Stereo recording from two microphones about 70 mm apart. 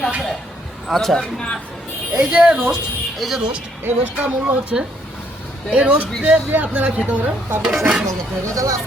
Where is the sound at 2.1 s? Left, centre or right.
Centre.